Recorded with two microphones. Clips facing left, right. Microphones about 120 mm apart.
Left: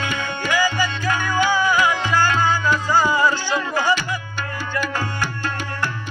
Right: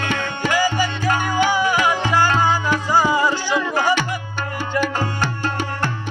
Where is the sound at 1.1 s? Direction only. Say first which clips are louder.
Right 1 dB; 25° right (ahead or behind).